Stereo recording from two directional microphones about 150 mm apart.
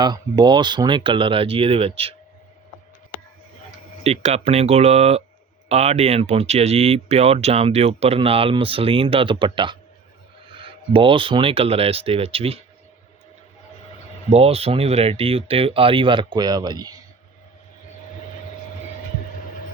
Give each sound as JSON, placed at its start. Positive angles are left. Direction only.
{"t": 0.0, "sound": "speech", "side_deg": -30}
{"t": 4.0, "sound": "speech", "side_deg": -45}
{"t": 14.3, "sound": "speech", "side_deg": -40}